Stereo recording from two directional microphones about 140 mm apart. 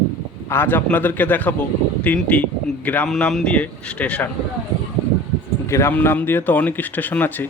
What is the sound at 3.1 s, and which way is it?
Speech, centre (ahead or behind).